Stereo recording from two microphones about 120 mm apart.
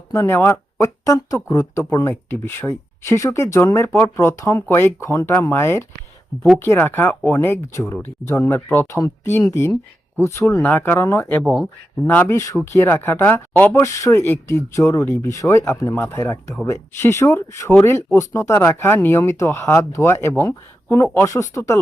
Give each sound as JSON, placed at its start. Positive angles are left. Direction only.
{"t": 0.1, "sound": "speech", "side_deg": 20}
{"t": 11.4, "sound": "speech", "side_deg": -5}
{"t": 12.0, "sound": "speech", "side_deg": 20}